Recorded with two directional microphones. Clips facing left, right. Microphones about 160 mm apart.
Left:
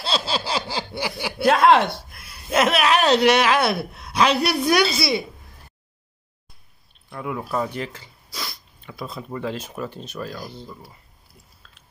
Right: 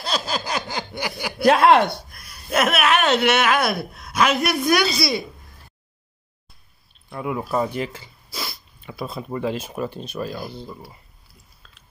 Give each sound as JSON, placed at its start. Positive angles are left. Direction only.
{"t": 0.0, "sound": "a sound", "side_deg": 30}
{"t": 1.0, "sound": "speech", "side_deg": 5}
{"t": 2.5, "sound": "a woman's voice", "side_deg": 30}
{"t": 7.1, "sound": "speech", "side_deg": -15}
{"t": 9.1, "sound": "speech", "side_deg": -20}